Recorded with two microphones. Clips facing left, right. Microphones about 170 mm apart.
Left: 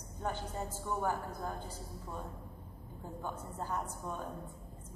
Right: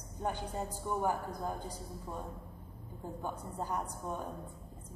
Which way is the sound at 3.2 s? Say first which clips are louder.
Right 1 dB; 15° right (ahead or behind).